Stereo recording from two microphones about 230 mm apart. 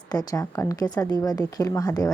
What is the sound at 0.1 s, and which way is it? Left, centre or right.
A woman's voice, centre.